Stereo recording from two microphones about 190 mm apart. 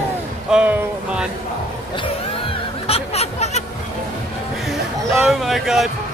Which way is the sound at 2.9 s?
35° left (ahead or behind).